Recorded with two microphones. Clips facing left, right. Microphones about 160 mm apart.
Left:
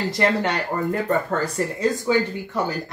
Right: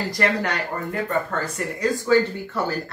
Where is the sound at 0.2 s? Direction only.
25° left (ahead or behind).